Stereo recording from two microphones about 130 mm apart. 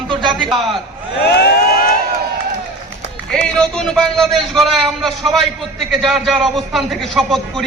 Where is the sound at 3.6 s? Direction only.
5° left (ahead or behind).